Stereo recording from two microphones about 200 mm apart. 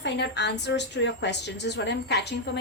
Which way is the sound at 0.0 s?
60° left (ahead or behind).